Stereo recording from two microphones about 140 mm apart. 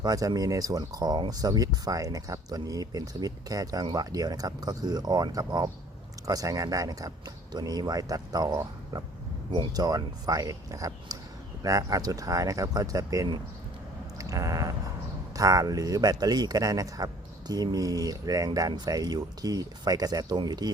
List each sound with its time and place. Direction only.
0.0 s speech: 25° right (ahead or behind)
14.2 s a sound: 25° right (ahead or behind)
15.4 s speech: 25° right (ahead or behind)